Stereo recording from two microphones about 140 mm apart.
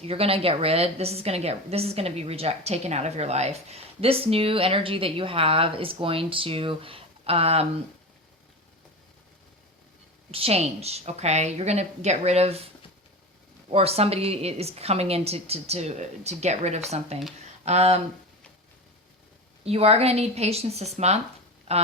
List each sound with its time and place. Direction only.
0.0 s a woman's voice: 45° right (ahead or behind)
10.3 s a woman's voice: 45° right (ahead or behind)
13.7 s a woman's voice: 45° right (ahead or behind)
19.6 s a woman's voice: 45° right (ahead or behind)